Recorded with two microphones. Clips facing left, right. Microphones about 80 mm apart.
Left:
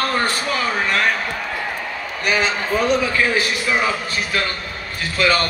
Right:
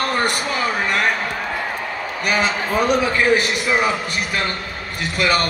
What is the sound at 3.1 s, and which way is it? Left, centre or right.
A man's voice, right.